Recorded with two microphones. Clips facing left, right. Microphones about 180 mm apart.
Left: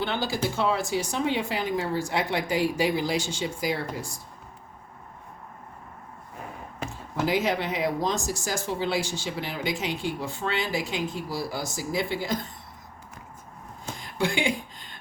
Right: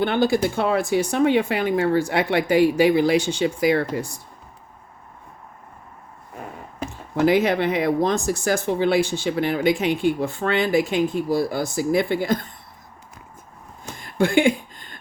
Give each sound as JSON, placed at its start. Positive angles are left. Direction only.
{"t": 0.0, "sound": "speech", "side_deg": -55}
{"t": 7.3, "sound": "speech", "side_deg": -60}
{"t": 14.0, "sound": "a sound", "side_deg": -55}